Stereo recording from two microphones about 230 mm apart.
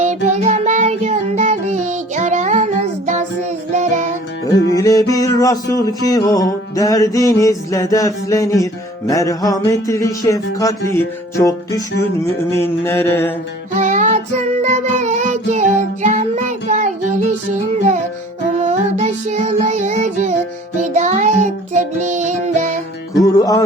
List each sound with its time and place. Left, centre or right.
0.3 s music: right
4.7 s music: centre
12.5 s music: centre
13.7 s music: right
18.5 s music: right
23.2 s music: centre